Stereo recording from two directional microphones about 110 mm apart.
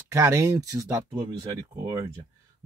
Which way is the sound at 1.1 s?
40° right (ahead or behind).